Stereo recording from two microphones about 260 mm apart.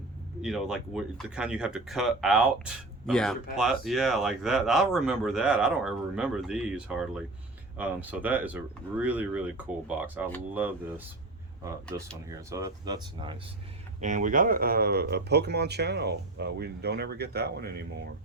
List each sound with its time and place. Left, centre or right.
0.4 s speech: centre
14.0 s speech: right